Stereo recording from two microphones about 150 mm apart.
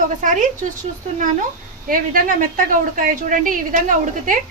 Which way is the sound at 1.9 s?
65° right (ahead or behind).